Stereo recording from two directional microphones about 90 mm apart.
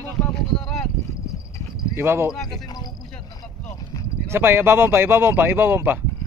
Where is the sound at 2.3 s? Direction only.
5° left (ahead or behind).